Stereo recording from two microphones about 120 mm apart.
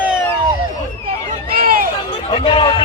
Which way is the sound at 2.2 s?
45° left (ahead or behind).